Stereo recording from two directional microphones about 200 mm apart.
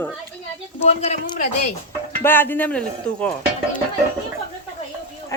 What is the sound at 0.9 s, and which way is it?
Speech, 30° left (ahead or behind).